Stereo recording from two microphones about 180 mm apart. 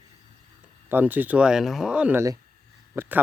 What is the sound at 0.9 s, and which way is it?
Speech, 10° right (ahead or behind).